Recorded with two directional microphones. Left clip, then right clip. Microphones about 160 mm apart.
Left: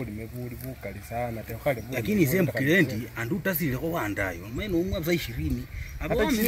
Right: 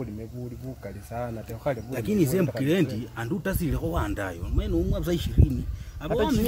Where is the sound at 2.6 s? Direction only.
10° right (ahead or behind).